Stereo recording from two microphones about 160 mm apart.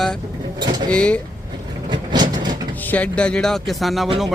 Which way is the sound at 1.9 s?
30° right (ahead or behind).